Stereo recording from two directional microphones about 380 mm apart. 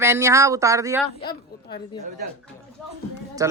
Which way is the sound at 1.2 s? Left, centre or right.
Centre.